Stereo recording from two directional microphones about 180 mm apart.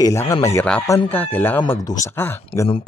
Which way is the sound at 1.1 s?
10° left (ahead or behind).